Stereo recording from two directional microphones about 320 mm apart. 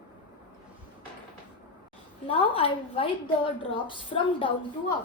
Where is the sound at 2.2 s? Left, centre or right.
Centre.